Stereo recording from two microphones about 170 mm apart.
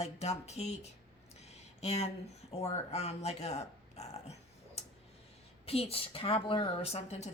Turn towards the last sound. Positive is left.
turn(degrees=40)  # may be behind; listen again after turning